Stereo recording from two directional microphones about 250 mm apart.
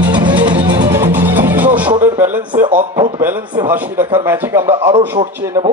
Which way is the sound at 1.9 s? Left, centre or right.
Centre.